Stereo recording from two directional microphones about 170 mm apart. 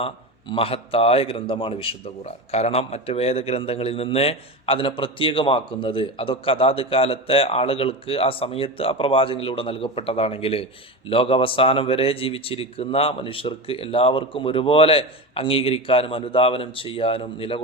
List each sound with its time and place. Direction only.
0.0 s a man's voice: 35° left (ahead or behind)